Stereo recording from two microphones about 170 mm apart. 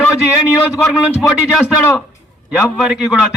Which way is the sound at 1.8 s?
5° left (ahead or behind).